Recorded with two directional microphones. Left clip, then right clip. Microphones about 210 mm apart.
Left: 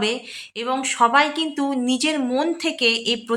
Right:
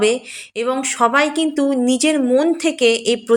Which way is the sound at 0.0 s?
15° right (ahead or behind).